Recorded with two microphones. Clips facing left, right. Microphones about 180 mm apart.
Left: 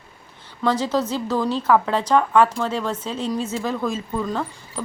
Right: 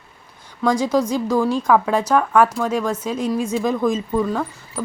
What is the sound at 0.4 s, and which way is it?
A woman's voice, 10° right (ahead or behind).